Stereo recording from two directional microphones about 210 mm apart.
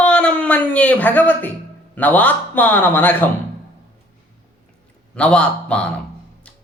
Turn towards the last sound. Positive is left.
turn(degrees=5)  # may be behind; listen again after turning